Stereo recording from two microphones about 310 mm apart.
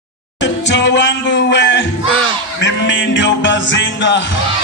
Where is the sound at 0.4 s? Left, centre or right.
Left.